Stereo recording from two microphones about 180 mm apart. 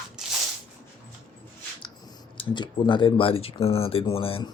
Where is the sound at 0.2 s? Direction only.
5° right (ahead or behind).